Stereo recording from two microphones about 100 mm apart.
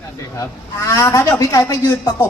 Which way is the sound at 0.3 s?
30° left (ahead or behind).